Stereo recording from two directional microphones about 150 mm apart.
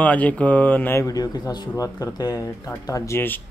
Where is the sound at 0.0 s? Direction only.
10° left (ahead or behind).